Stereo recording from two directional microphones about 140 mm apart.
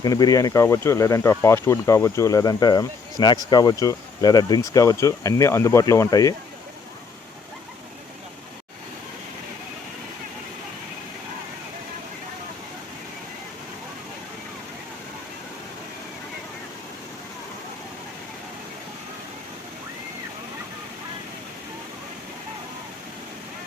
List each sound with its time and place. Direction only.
0.0 s speech: 25° left (ahead or behind)